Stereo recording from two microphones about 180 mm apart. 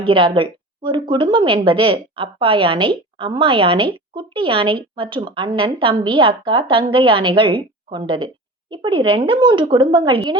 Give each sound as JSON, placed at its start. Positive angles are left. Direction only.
{"t": 0.0, "sound": "a woman's voice", "side_deg": -30}